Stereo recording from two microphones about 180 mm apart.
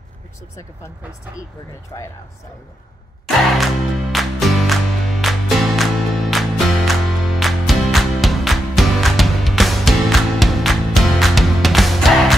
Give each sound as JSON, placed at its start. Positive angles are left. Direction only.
{"t": 1.9, "sound": "speech", "side_deg": 20}
{"t": 3.3, "sound": "music", "side_deg": 0}